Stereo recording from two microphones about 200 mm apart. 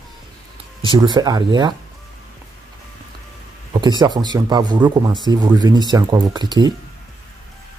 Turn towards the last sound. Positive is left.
turn(degrees=-20)  # may be behind; listen again after turning